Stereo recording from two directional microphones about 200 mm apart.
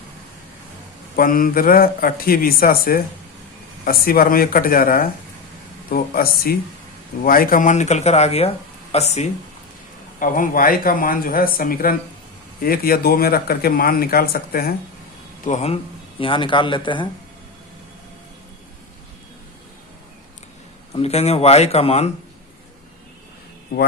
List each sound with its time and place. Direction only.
1.1 s speech: 45° left (ahead or behind)
15.4 s speech: 35° left (ahead or behind)
20.9 s speech: 30° left (ahead or behind)